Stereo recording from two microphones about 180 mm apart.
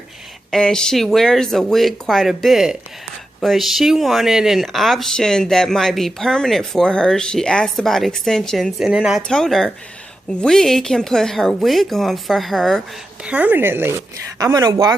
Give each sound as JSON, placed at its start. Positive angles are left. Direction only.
{"t": 0.5, "sound": "speech", "side_deg": 5}